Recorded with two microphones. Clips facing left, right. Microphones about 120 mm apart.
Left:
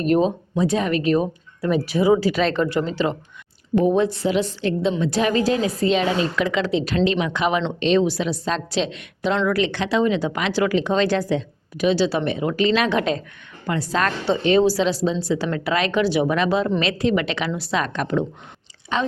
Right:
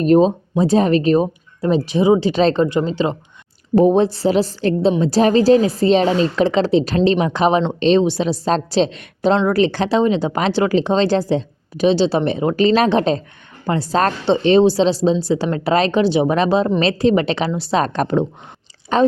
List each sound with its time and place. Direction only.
0.0 s speech: 30° right (ahead or behind)
3.8 s a woman's voice: 30° right (ahead or behind)